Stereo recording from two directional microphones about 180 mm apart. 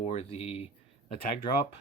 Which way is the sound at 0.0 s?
35° left (ahead or behind).